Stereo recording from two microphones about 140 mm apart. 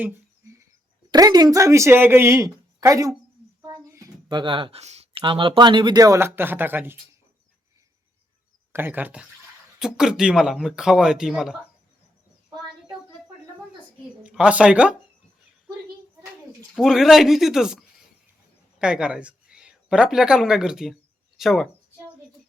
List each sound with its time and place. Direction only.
0.0 s a sound: 15° right (ahead or behind)
1.1 s speech: 30° right (ahead or behind)
3.6 s a sound: 25° right (ahead or behind)
4.3 s speech: 35° right (ahead or behind)
4.8 s speech: 50° right (ahead or behind); by 7.0 s 15° right (ahead or behind)
8.7 s speech: 15° right (ahead or behind)
14.3 s a woman's voice: 10° right (ahead or behind)
16.7 s speech: centre (ahead or behind)